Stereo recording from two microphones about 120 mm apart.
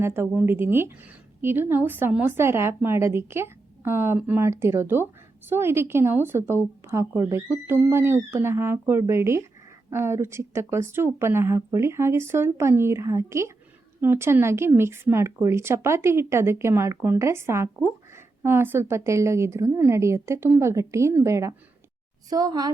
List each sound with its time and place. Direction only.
0.0 s a woman's voice: 20° right (ahead or behind)